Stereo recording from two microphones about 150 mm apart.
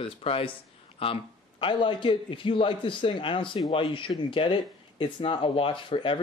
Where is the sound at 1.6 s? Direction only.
35° left (ahead or behind).